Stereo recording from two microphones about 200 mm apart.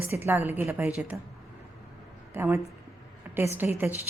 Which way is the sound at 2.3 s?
15° right (ahead or behind).